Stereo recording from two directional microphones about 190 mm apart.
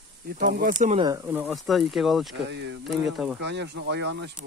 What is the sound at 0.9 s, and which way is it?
Speech, 20° right (ahead or behind).